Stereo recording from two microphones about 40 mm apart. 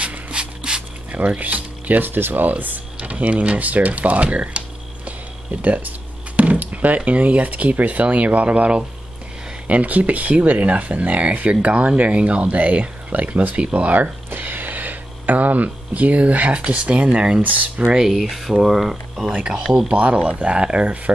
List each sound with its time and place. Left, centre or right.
0.0 s a sound: right
1.1 s speech: right
2.0 s speech: right
2.4 s speech: right
3.0 s a sound: right
7.1 s speech: right
13.9 s speech: right
17.4 s speech: right
18.2 s speech: centre
19.3 s speech: centre
19.9 s speech: right